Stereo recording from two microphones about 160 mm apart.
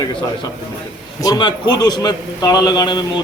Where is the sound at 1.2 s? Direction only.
25° left (ahead or behind).